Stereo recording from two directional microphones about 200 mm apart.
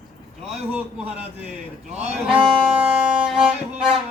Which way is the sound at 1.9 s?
35° right (ahead or behind).